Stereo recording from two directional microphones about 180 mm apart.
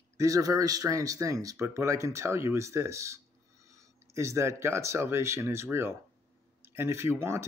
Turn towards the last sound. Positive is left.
turn(degrees=-15)  # may be behind; listen again after turning